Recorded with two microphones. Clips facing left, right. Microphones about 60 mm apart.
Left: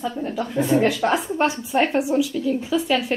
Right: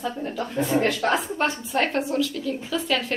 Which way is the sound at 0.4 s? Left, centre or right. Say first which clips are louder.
Left 4 dB; centre.